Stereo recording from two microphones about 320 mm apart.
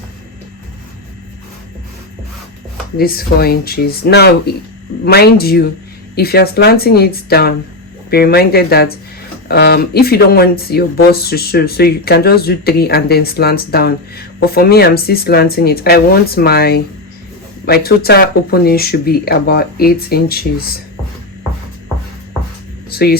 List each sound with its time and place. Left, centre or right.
3.0 s speech: left
22.9 s speech: left